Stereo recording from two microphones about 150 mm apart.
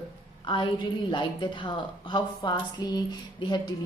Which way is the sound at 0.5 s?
35° left (ahead or behind).